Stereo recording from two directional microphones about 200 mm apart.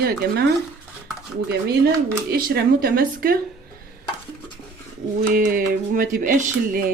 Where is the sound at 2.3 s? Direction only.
50° right (ahead or behind).